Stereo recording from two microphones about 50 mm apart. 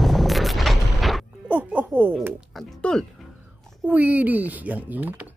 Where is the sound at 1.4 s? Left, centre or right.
Right.